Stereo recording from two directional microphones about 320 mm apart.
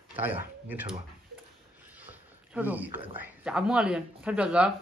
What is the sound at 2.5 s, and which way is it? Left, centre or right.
Speech, centre.